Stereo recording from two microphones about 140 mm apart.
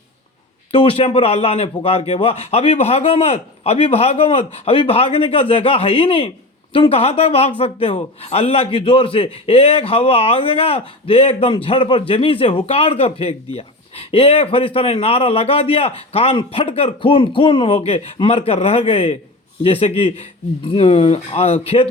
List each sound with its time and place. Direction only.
0.7 s a man's voice: 40° left (ahead or behind)